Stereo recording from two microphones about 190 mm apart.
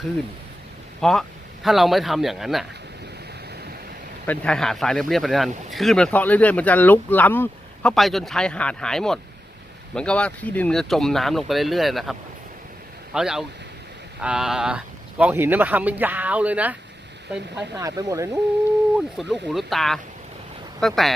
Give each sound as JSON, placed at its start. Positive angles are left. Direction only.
{"t": 1.0, "sound": "speech", "side_deg": 0}
{"t": 4.3, "sound": "speech", "side_deg": 5}
{"t": 13.1, "sound": "speech", "side_deg": -5}
{"t": 17.7, "sound": "speech", "side_deg": -20}
{"t": 18.9, "sound": "speech", "side_deg": 0}